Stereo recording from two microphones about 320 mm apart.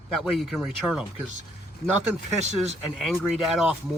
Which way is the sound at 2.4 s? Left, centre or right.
Right.